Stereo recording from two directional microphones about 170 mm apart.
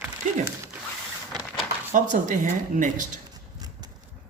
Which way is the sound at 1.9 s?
50° right (ahead or behind).